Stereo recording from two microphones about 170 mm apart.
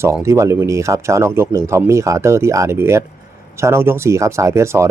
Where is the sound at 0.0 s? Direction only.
15° right (ahead or behind).